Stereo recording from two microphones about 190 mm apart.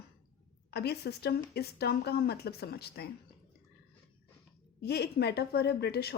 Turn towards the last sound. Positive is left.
turn(degrees=60)  # may be behind; listen again after turning